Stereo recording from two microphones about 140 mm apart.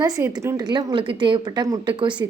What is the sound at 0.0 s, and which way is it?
Speech, 25° right (ahead or behind).